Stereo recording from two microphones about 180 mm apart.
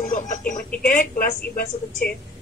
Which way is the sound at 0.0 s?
45° left (ahead or behind).